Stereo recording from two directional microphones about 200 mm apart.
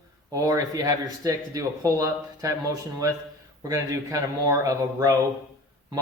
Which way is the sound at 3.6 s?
15° right (ahead or behind).